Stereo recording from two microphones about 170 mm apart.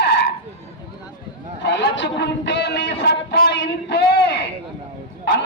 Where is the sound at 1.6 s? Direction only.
90° left.